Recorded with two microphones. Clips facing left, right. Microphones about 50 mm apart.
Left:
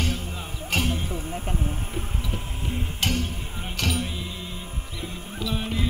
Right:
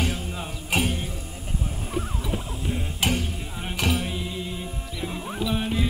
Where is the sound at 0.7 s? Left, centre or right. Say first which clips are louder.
Right 1 dB; centre.